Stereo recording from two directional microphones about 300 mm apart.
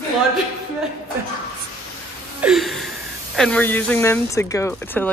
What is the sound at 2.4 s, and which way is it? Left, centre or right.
Speech, centre.